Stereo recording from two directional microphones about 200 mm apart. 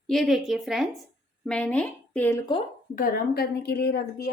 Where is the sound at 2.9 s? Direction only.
45° left (ahead or behind).